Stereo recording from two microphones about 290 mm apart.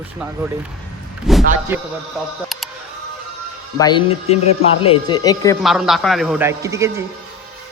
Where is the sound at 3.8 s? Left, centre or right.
Centre.